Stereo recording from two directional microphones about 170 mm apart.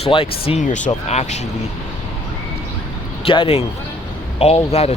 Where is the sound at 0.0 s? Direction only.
35° left (ahead or behind).